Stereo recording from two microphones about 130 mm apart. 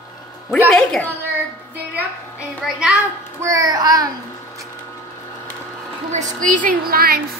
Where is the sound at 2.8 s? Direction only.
5° right (ahead or behind).